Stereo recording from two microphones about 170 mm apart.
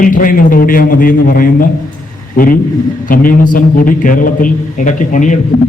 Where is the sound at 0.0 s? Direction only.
50° left (ahead or behind).